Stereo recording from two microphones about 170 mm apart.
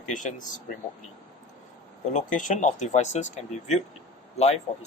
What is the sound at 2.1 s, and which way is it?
Speech, 50° left (ahead or behind).